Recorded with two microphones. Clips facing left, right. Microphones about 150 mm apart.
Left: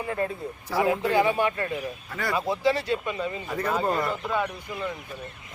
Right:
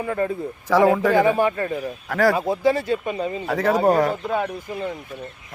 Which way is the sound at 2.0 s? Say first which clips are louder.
Right 17 dB; 90° right.